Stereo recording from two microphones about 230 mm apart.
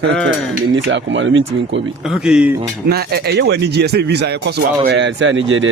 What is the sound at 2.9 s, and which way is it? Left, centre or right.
A man's voice, right.